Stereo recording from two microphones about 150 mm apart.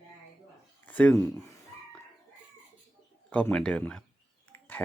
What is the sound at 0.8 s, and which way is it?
Speech, 10° left (ahead or behind).